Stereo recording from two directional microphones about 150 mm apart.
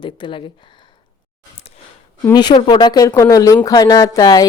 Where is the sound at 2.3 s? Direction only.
30° left (ahead or behind).